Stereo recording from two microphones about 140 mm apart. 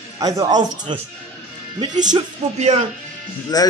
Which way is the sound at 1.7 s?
60° right (ahead or behind).